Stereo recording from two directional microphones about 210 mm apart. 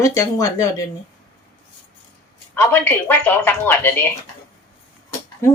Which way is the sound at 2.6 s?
10° left (ahead or behind).